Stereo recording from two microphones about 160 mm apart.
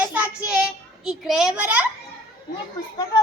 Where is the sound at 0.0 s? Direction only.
10° right (ahead or behind).